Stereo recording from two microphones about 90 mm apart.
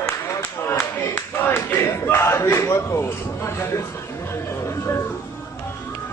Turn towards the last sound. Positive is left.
turn(degrees=30)  # may be behind; listen again after turning